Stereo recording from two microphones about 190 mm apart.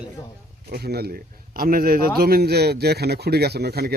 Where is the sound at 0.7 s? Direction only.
55° right (ahead or behind).